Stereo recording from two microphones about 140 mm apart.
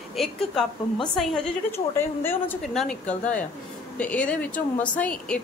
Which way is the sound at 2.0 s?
15° left (ahead or behind).